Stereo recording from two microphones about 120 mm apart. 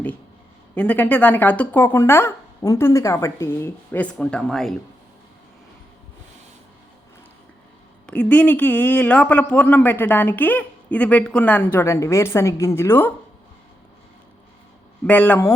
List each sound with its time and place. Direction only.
0.8 s a man's voice: 10° left (ahead or behind)
8.0 s a man's voice: 10° left (ahead or behind)
15.0 s a man's voice: 15° left (ahead or behind)